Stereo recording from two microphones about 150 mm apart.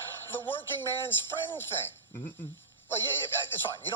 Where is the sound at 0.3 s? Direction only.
15° left (ahead or behind).